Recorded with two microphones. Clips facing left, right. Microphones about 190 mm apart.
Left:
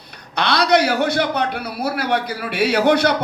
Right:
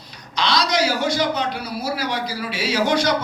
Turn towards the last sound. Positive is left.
turn(degrees=60)  # may be behind; listen again after turning